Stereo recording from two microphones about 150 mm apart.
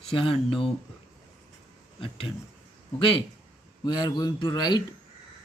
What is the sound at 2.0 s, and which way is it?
Speech, 35° left (ahead or behind).